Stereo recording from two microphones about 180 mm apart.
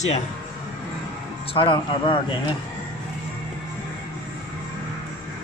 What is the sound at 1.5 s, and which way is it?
Speech, 30° left (ahead or behind).